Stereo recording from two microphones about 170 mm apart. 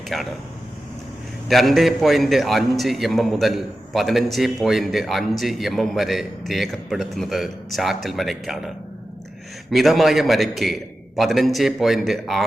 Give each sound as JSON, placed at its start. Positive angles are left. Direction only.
{"t": 0.1, "sound": "a man's voice", "side_deg": 0}
{"t": 1.5, "sound": "a man's voice", "side_deg": 0}